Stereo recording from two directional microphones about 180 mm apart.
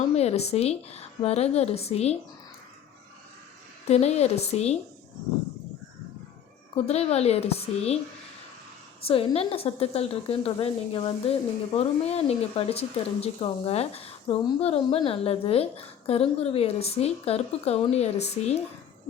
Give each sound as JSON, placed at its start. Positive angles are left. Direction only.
{"t": 0.2, "sound": "a woman's voice", "side_deg": 35}
{"t": 3.8, "sound": "a woman's voice", "side_deg": 35}
{"t": 6.7, "sound": "a woman's voice", "side_deg": 35}
{"t": 9.0, "sound": "a woman's voice", "side_deg": 30}